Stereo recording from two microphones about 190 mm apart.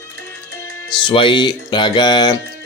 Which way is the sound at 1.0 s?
25° left (ahead or behind).